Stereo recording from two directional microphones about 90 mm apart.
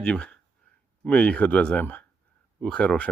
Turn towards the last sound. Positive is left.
turn(degrees=10)  # may be behind; listen again after turning